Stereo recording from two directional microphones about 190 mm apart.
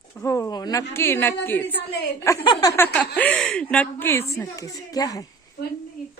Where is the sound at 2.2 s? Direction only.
20° left (ahead or behind).